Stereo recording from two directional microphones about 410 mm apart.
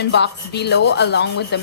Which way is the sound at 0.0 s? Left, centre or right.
Left.